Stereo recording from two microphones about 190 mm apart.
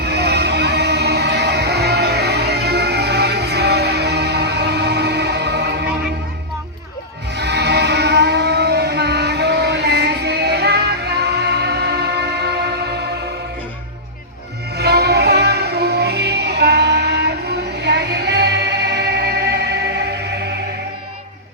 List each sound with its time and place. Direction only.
0.0 s music: 60° right (ahead or behind)
7.3 s music: 60° right (ahead or behind)
14.8 s music: 60° right (ahead or behind)